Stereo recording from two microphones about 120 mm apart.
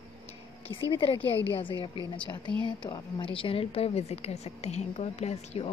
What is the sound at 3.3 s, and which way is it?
A woman's voice, 50° left (ahead or behind).